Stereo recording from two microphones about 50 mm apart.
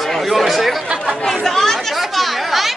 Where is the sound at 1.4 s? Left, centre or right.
Centre.